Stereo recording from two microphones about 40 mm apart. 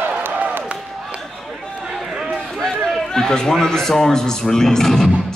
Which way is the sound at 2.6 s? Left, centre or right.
Centre.